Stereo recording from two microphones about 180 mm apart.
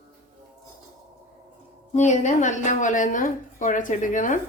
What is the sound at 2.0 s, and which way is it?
A woman's voice, 40° left (ahead or behind).